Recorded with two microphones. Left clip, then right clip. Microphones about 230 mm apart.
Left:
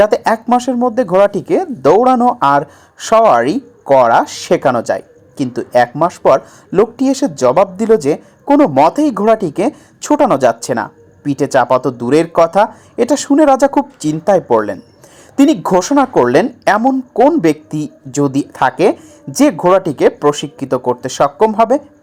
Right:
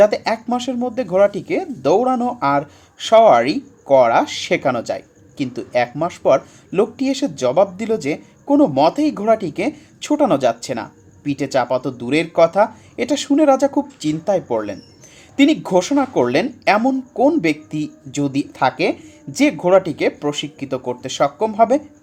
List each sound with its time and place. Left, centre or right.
0.0 s a woman's voice: left